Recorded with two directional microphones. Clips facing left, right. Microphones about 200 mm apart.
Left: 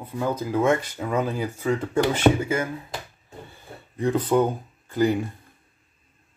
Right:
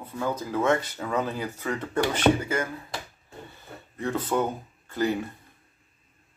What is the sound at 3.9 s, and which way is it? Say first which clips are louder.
Speech: left 6 dB; 15° left (ahead or behind).